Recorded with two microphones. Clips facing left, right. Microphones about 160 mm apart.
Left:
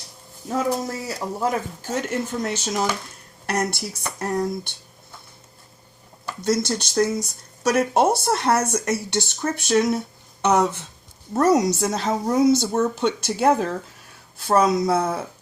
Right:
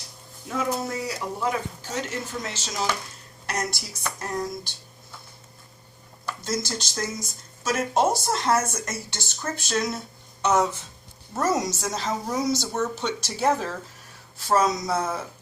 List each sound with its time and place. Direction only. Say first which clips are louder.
1.0 s speech: left 3 dB; 45° left (ahead or behind); by 4.7 s 60° left (ahead or behind)
6.4 s speech: left 8 dB; 60° left (ahead or behind)